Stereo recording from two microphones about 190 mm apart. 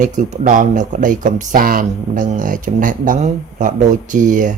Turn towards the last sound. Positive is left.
turn(degrees=-45)  # may be behind; listen again after turning